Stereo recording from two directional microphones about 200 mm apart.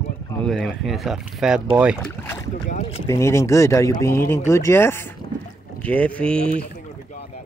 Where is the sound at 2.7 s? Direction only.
30° left (ahead or behind).